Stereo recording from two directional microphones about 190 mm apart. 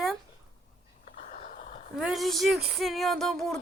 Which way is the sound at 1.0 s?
40° left (ahead or behind).